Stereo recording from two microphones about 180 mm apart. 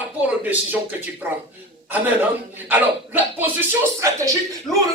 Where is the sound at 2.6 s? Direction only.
10° right (ahead or behind).